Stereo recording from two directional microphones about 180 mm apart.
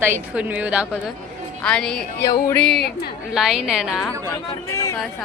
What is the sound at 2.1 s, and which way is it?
Speech, 15° left (ahead or behind).